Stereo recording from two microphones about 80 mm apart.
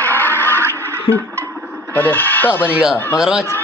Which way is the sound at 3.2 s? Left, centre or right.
Centre.